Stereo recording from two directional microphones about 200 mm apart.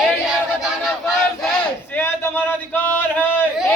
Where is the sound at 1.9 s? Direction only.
10° left (ahead or behind).